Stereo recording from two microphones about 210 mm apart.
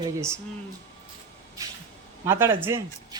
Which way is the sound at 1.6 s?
15° right (ahead or behind).